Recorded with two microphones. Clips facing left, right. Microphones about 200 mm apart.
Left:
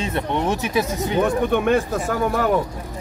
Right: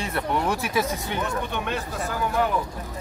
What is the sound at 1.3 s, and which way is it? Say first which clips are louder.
Speech: left 10 dB; 50° left (ahead or behind).